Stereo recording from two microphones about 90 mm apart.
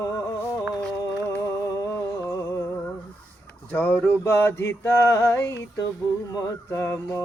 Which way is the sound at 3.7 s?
20° left (ahead or behind).